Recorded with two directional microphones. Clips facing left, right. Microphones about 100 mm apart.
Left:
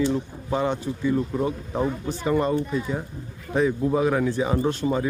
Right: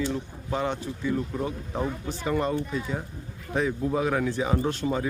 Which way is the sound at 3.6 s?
20° left (ahead or behind).